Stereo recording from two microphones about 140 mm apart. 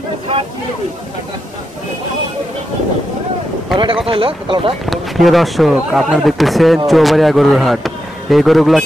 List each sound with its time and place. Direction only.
3.7 s speech: 35° right (ahead or behind)
4.8 s speech: centre (ahead or behind)